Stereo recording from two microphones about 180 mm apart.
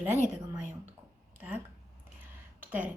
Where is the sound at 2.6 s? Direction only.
10° right (ahead or behind).